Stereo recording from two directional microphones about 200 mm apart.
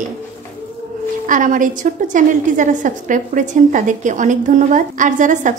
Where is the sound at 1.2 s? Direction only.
40° right (ahead or behind).